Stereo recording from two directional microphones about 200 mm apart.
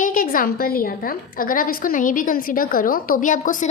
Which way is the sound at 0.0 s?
45° left (ahead or behind).